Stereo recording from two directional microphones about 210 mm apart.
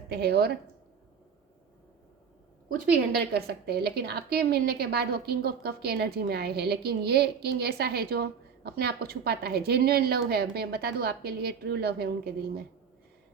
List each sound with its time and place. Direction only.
0.1 s a woman's voice: 50° right (ahead or behind)
3.1 s a woman's voice: 50° right (ahead or behind)